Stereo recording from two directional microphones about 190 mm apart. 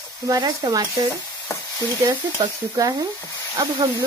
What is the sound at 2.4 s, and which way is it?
Speech, 20° right (ahead or behind).